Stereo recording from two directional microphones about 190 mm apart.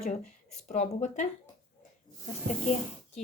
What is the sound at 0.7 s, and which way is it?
Speech, 35° left (ahead or behind).